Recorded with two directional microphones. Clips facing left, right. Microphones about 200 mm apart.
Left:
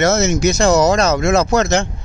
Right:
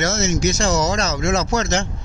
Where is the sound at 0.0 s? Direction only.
60° left (ahead or behind).